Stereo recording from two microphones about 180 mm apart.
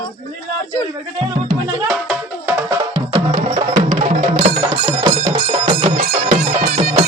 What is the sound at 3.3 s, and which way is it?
Music, 40° right (ahead or behind).